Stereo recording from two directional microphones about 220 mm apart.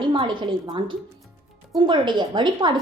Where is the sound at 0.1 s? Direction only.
20° right (ahead or behind).